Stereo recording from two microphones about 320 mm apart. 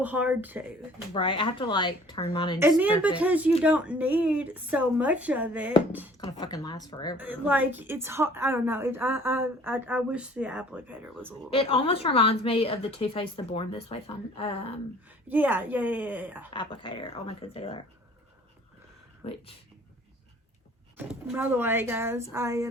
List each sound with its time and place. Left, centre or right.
0.0 s speech: centre
1.1 s a woman's voice: centre
2.6 s speech: centre
6.1 s a woman's voice: centre
7.2 s a woman's voice: centre
11.5 s a woman's voice: centre
15.3 s speech: centre
16.5 s a woman's voice: centre
21.1 s a woman's voice: centre